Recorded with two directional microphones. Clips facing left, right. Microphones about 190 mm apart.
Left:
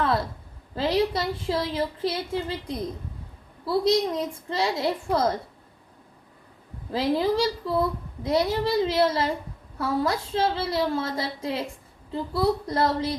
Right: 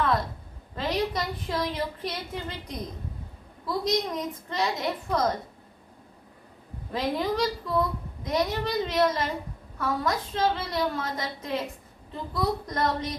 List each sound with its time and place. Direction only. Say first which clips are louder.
0.8 s a woman's voice: left 4 dB; 30° left (ahead or behind)
6.9 s a woman's voice: left 4 dB; 30° left (ahead or behind)